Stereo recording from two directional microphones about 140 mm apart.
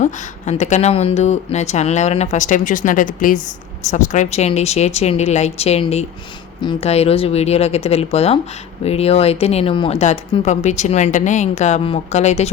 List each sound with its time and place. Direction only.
0.0 s speech: 55° left (ahead or behind)
3.8 s speech: 60° left (ahead or behind); by 10.0 s 35° left (ahead or behind)
10.0 s speech: 55° left (ahead or behind)